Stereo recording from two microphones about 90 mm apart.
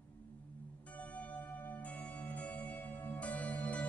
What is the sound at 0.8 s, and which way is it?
Music, 15° left (ahead or behind).